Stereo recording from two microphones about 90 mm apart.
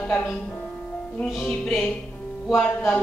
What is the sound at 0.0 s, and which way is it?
Speech, 25° left (ahead or behind).